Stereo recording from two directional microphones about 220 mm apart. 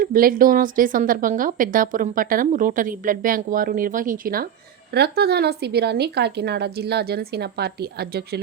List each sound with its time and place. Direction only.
0.0 s a woman's voice: 40° right (ahead or behind)